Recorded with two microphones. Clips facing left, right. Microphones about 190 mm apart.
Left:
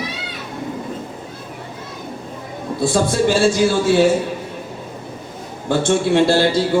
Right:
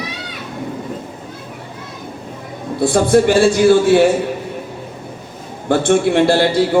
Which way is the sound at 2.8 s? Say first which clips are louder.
Right 5 dB; 55° right (ahead or behind).